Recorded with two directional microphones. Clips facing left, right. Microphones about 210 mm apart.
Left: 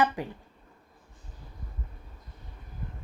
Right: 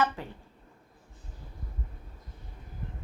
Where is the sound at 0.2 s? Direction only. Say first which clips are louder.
Left 5 dB; 15° left (ahead or behind).